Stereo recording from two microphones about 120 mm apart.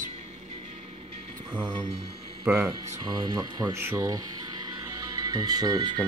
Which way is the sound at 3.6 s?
20° right (ahead or behind).